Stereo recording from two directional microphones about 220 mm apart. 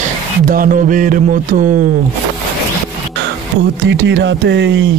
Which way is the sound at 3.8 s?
55° right (ahead or behind).